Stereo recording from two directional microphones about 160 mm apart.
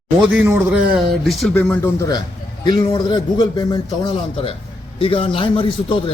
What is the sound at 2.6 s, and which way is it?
A man's voice, 25° left (ahead or behind).